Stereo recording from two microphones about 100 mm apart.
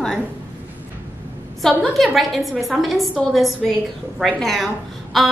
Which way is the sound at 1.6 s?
Centre (ahead or behind).